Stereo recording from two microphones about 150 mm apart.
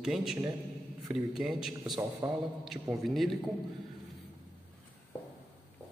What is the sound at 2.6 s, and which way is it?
Speech, centre (ahead or behind).